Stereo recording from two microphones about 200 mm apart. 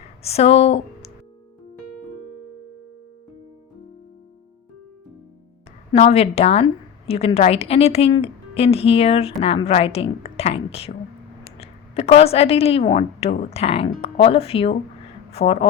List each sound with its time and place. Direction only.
0.2 s speech: 30° left (ahead or behind)
5.9 s a woman's voice: 30° left (ahead or behind)